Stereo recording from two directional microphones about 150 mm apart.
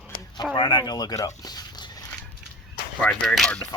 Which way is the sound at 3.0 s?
5° left (ahead or behind).